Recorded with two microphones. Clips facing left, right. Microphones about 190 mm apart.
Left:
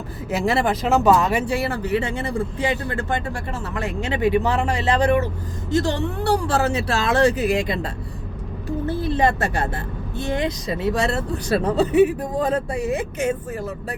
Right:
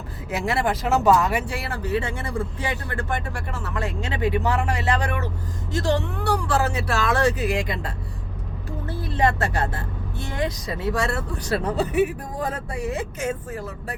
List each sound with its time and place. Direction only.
0.3 s speech: 25° left (ahead or behind)
8.9 s speech: 25° left (ahead or behind)